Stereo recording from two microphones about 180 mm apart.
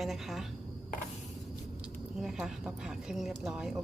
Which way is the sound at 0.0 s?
Centre (ahead or behind).